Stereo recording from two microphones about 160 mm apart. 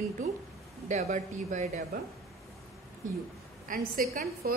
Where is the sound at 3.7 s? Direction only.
60° right (ahead or behind).